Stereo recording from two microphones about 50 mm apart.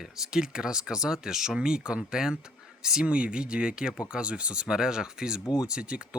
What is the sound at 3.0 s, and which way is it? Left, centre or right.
Speech, right.